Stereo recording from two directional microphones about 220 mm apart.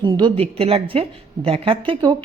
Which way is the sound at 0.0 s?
20° right (ahead or behind).